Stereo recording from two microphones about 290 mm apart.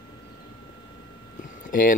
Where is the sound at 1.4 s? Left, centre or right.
Left.